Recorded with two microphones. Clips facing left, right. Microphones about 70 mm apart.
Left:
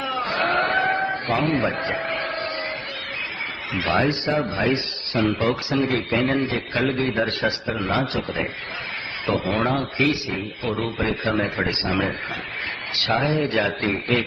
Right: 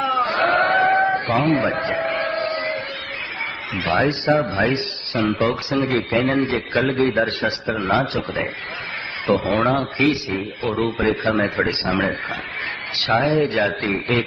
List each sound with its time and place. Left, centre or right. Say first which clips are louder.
0.0 s sheep: right 5 dB; right
2.0 s a sound: right 5 dB; right
3.8 s a man's voice: right 3 dB; right
9.2 s a man's voice: right 4 dB; right